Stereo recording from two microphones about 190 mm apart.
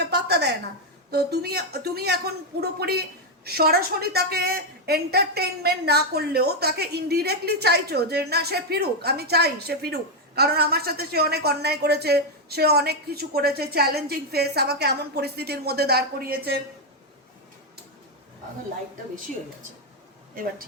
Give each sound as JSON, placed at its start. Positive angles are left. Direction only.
{"t": 0.0, "sound": "a sound", "side_deg": -60}
{"t": 1.1, "sound": "a woman's voice", "side_deg": -55}
{"t": 20.3, "sound": "speech", "side_deg": -50}